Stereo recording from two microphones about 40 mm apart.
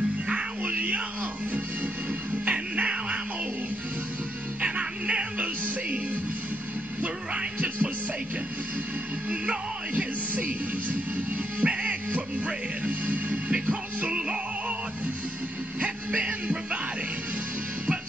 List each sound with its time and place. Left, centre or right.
0.3 s music: right
2.4 s music: right
4.6 s music: right
7.3 s music: right
9.3 s music: right
15.8 s a sound: right